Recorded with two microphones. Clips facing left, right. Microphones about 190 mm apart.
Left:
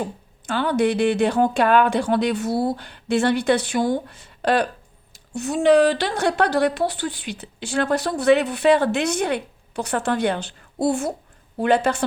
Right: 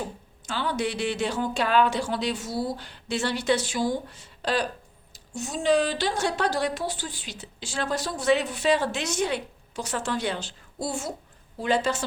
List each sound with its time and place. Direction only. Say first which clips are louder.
0.4 s a woman's voice: left 8 dB; 55° left (ahead or behind)